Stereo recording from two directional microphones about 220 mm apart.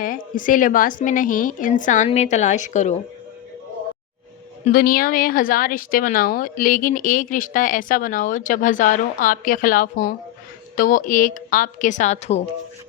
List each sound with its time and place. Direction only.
0.0 s a woman's voice: 40° left (ahead or behind)
4.6 s a woman's voice: 40° left (ahead or behind)